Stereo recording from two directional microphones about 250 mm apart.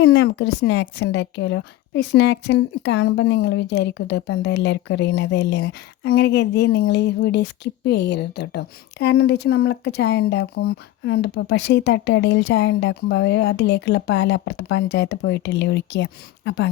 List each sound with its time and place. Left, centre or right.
0.0 s a woman's voice: left